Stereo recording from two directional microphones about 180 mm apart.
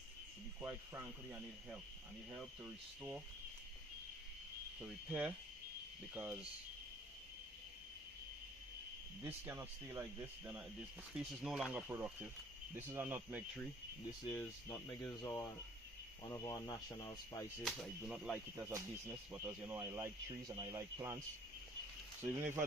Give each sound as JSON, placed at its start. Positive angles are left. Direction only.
{"t": 0.6, "sound": "speech", "side_deg": -10}
{"t": 4.8, "sound": "speech", "side_deg": -10}
{"t": 9.2, "sound": "speech", "side_deg": -15}
{"t": 11.1, "sound": "speech", "side_deg": 0}
{"t": 14.3, "sound": "speech", "side_deg": 15}
{"t": 17.6, "sound": "speech", "side_deg": 5}
{"t": 18.5, "sound": "speech", "side_deg": -15}